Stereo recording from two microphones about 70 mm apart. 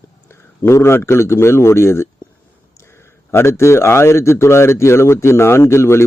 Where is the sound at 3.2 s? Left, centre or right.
Left.